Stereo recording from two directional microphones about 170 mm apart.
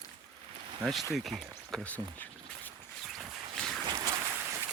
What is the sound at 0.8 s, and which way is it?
Speech, centre (ahead or behind).